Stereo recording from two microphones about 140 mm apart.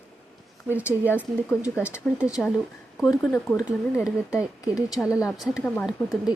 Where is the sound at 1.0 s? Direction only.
15° left (ahead or behind).